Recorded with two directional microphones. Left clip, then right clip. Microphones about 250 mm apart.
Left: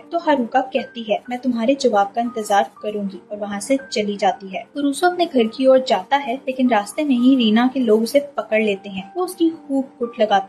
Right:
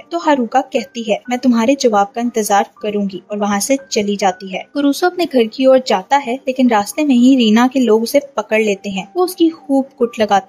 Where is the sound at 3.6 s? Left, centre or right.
Right.